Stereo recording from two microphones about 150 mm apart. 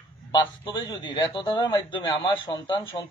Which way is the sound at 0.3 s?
30° left (ahead or behind).